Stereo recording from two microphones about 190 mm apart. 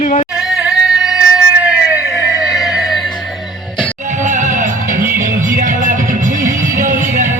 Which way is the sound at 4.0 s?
40° right (ahead or behind).